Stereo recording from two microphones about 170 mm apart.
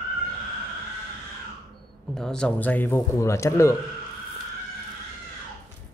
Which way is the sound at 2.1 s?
5° left (ahead or behind).